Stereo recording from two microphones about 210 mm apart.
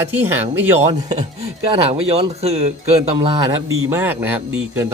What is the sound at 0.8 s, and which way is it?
Speech, 30° right (ahead or behind).